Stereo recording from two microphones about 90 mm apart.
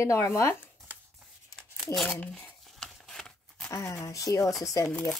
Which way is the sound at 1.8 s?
Centre (ahead or behind).